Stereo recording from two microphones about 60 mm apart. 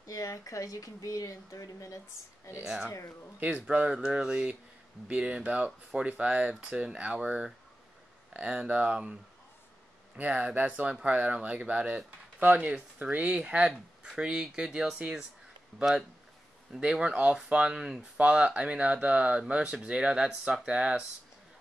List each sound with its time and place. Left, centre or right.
0.0 s speech: left
2.6 s speech: centre
2.9 s speech: left
3.3 s speech: right
4.0 s speech: centre
16.7 s speech: centre